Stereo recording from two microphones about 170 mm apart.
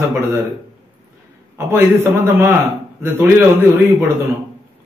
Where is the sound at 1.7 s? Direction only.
15° right (ahead or behind).